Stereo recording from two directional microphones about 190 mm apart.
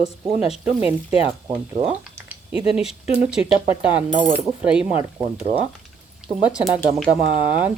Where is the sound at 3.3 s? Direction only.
5° right (ahead or behind).